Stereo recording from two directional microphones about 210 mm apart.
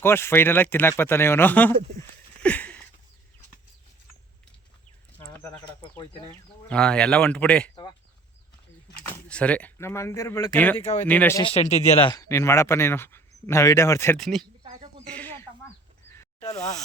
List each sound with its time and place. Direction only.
0.0 s speech: 10° left (ahead or behind)
6.7 s speech: 5° left (ahead or behind)
9.3 s speech: 5° left (ahead or behind)
10.8 s speech: 30° left (ahead or behind)
11.0 s speech: 10° left (ahead or behind)
11.4 s speech: 30° left (ahead or behind)
12.0 s speech: 15° left (ahead or behind)
16.0 s a sound: 10° left (ahead or behind)